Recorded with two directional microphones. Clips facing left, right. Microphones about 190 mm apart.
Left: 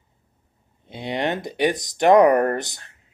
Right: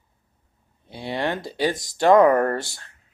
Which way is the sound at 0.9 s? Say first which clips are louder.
Left 1 dB; 20° left (ahead or behind).